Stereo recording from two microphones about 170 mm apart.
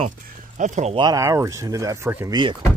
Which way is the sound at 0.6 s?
45° right (ahead or behind).